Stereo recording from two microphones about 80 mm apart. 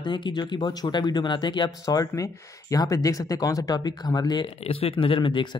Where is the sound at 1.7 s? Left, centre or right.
Left.